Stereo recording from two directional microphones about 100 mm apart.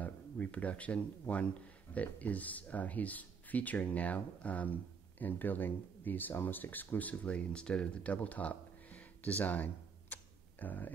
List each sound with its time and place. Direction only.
0.0 s speech: 15° left (ahead or behind)
10.1 s camera: 15° left (ahead or behind)